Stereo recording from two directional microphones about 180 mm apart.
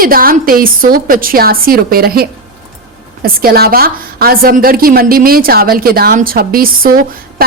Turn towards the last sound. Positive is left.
turn(degrees=-55)  # may be behind; listen again after turning